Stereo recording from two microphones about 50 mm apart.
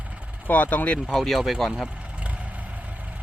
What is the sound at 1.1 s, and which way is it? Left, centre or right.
Speech, centre.